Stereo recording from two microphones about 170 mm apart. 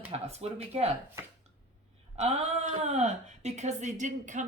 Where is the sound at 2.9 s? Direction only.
40° right (ahead or behind).